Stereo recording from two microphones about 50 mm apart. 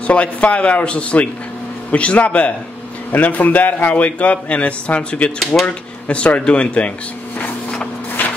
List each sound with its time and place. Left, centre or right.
0.0 s a man's voice: left